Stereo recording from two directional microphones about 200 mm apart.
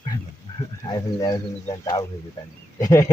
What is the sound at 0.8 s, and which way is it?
Speech, 20° left (ahead or behind).